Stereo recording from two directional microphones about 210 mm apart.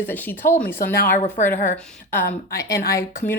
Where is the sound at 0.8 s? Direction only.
45° left (ahead or behind).